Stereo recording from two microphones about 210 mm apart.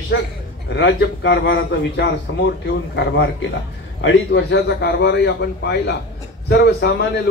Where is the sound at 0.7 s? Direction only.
55° left (ahead or behind).